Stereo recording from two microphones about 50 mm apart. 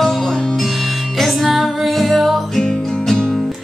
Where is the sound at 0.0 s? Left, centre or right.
Centre.